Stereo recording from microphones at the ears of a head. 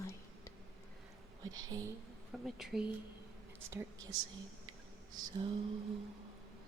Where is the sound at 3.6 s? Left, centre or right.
Right.